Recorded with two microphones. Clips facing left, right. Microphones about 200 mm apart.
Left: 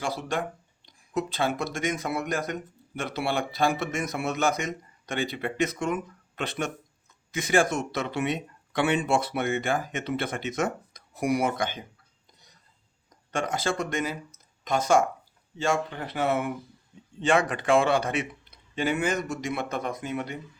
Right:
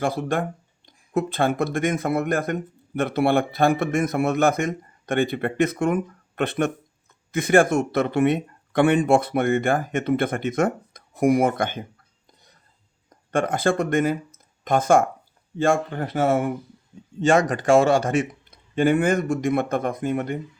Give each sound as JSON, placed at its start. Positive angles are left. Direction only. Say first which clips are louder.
{"t": 0.0, "sound": "speech", "louder": "right 6 dB", "side_deg": -55}
{"t": 13.1, "sound": "speech", "louder": "right 6 dB", "side_deg": -55}